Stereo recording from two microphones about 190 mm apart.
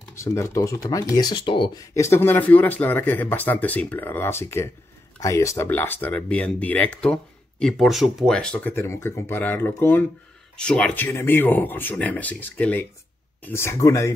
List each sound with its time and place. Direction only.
0.1 s speech: 15° left (ahead or behind)
2.0 s speech: 15° left (ahead or behind)